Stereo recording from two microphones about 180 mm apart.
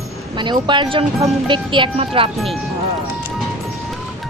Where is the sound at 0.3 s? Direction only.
25° right (ahead or behind).